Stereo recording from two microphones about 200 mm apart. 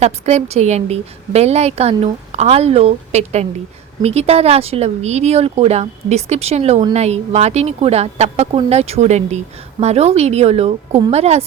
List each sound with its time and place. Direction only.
0.0 s a woman's voice: 35° right (ahead or behind)